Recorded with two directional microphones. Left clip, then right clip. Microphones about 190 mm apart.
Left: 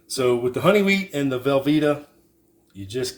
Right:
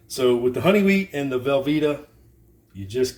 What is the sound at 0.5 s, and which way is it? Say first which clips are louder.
Speech: left 1 dB; 35° left (ahead or behind).